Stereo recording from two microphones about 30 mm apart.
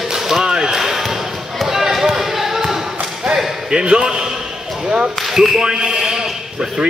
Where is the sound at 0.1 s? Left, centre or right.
Centre.